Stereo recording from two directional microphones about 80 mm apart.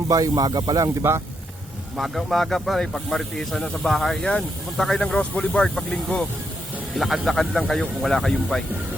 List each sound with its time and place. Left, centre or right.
0.1 s speech: right
2.0 s speech: centre
6.9 s speech: centre